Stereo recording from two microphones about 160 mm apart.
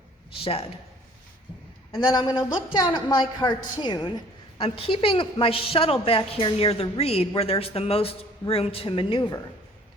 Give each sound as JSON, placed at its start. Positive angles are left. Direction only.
{"t": 1.9, "sound": "a woman's voice", "side_deg": 25}